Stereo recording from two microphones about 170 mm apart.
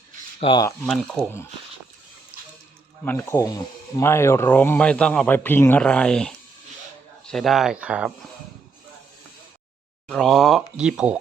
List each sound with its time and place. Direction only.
0.3 s speech: 35° left (ahead or behind)
0.9 s speech: centre (ahead or behind)
3.0 s speech: 10° left (ahead or behind); by 8.1 s 5° right (ahead or behind)
10.1 s speech: centre (ahead or behind)